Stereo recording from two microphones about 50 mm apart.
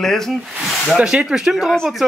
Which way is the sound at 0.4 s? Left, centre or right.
Centre.